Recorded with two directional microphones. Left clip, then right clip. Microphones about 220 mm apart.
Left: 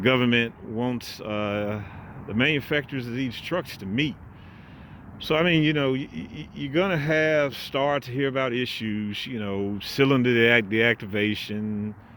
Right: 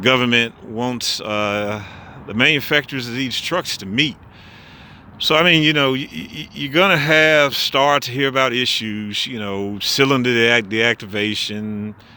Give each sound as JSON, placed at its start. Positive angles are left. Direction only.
{"t": 0.0, "sound": "speech", "side_deg": -10}
{"t": 5.2, "sound": "speech", "side_deg": -15}